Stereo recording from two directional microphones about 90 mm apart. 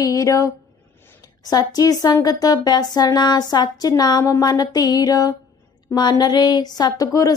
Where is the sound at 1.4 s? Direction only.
45° left (ahead or behind).